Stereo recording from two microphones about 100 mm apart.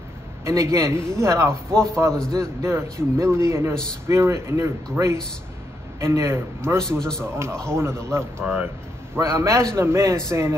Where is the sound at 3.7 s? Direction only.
5° left (ahead or behind).